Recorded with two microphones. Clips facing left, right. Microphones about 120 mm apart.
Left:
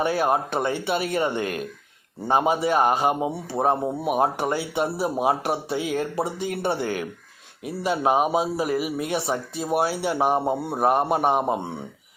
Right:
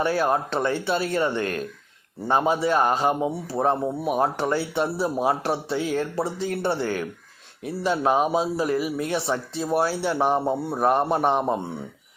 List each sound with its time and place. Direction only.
0.0 s a man's voice: 15° left (ahead or behind)